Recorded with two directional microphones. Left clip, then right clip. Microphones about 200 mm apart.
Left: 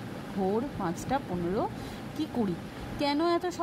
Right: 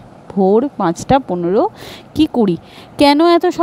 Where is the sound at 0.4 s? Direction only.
35° right (ahead or behind).